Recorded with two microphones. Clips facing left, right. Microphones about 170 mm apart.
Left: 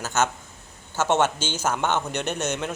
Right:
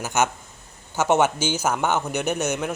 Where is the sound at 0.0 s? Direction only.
15° right (ahead or behind).